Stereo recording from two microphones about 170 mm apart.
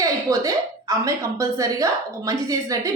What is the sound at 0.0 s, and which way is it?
A woman's voice, 20° right (ahead or behind).